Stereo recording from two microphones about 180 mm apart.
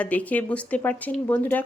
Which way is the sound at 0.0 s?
10° left (ahead or behind).